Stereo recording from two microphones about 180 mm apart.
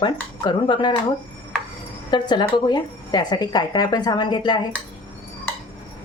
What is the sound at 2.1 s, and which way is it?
Speech, 25° left (ahead or behind).